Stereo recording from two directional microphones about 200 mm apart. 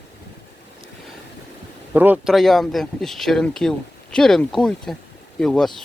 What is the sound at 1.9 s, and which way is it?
Speech, 10° right (ahead or behind).